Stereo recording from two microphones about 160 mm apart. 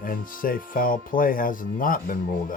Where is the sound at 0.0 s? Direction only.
60° left (ahead or behind).